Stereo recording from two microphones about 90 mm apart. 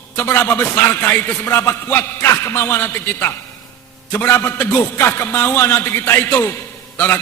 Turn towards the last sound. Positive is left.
turn(degrees=25)  # may be behind; listen again after turning